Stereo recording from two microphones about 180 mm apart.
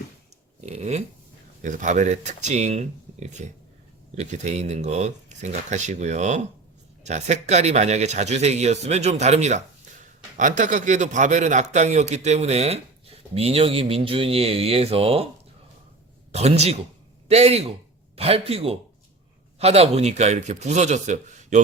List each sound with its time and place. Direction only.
0.6 s a sound: 35° right (ahead or behind)
1.6 s a man's voice: 45° right (ahead or behind)
16.3 s a man's voice: 35° right (ahead or behind)